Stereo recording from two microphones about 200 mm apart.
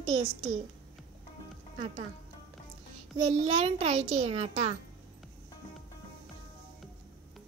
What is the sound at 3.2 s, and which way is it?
A child's voice, 30° right (ahead or behind).